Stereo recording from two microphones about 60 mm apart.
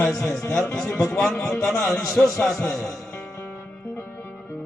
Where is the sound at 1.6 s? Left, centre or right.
Left.